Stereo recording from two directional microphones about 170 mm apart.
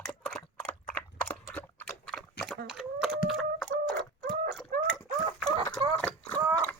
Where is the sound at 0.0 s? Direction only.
5° left (ahead or behind).